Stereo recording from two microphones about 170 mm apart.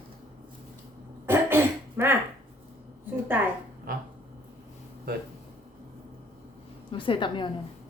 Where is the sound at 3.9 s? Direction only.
60° right (ahead or behind).